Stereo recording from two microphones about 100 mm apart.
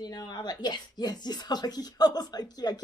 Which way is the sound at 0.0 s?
45° left (ahead or behind).